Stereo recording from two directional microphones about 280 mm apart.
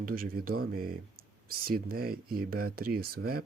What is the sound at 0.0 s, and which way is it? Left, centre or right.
Speech, right.